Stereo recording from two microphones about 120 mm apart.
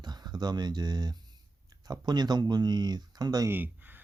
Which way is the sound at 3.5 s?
15° right (ahead or behind).